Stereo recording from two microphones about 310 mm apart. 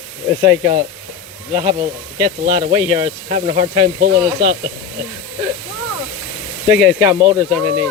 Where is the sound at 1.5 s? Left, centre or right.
Right.